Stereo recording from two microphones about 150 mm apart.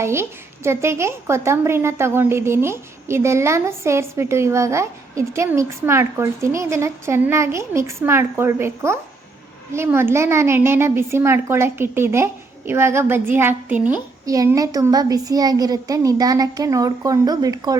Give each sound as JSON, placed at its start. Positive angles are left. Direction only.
{"t": 0.0, "sound": "a woman's voice", "side_deg": -15}
{"t": 14.3, "sound": "a woman's voice", "side_deg": -25}